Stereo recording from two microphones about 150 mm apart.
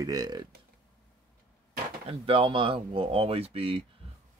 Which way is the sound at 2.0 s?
35° right (ahead or behind).